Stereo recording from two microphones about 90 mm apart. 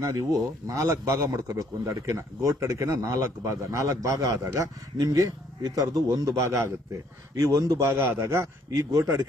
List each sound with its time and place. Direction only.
0.0 s a man's voice: 40° right (ahead or behind)
7.9 s a man's voice: 30° right (ahead or behind)